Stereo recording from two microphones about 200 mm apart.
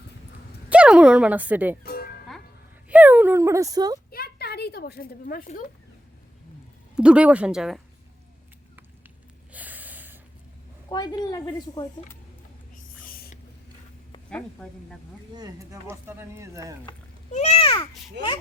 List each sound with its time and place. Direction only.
0.7 s speech: 5° right (ahead or behind)
1.8 s music: 50° left (ahead or behind)
2.9 s a sound: 10° right (ahead or behind)
4.1 s a sound: 50° left (ahead or behind)
6.9 s speech: 5° right (ahead or behind)
9.5 s snort: 10° right (ahead or behind)
10.8 s a woman's voice: 20° left (ahead or behind)
13.1 s a sound: 45° left (ahead or behind)
14.3 s speech: 5° left (ahead or behind)
15.4 s speech: 15° right (ahead or behind)
17.3 s a child's voice: 30° left (ahead or behind)